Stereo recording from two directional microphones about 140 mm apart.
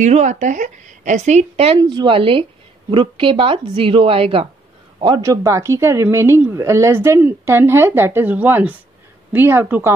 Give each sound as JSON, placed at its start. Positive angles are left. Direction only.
{"t": 0.0, "sound": "a woman's voice", "side_deg": -60}
{"t": 1.8, "sound": "a woman's voice", "side_deg": -30}
{"t": 5.0, "sound": "speech", "side_deg": -30}